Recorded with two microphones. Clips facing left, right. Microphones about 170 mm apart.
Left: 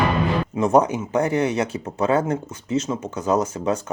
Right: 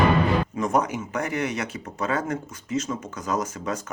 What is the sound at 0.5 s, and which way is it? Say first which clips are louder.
Speech: left 6 dB; 30° left (ahead or behind).